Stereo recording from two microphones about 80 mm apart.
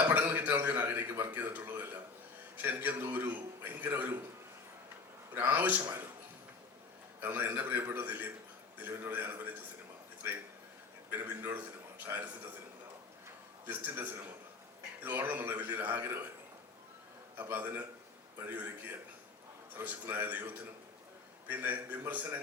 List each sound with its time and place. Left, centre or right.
0.0 s a man's voice: right
5.3 s a man's voice: right
7.2 s a man's voice: right
11.1 s a man's voice: right
13.7 s a man's voice: right
17.3 s a man's voice: right